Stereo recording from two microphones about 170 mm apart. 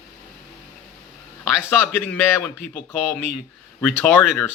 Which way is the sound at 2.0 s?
15° left (ahead or behind).